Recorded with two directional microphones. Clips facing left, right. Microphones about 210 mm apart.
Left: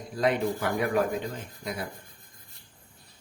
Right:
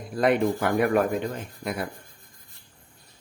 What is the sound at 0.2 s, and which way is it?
Speech, 55° right (ahead or behind).